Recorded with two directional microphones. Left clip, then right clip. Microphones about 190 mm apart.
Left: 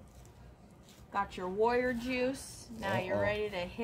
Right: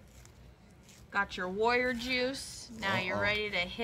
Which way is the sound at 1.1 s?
30° left (ahead or behind).